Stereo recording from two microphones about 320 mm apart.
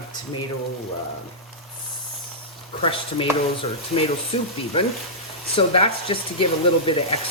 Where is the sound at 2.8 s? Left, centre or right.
Centre.